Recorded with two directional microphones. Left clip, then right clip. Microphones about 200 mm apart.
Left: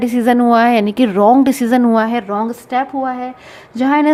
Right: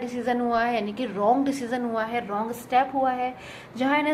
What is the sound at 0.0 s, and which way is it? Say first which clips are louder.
A woman's voice: left 13 dB; 60° left (ahead or behind).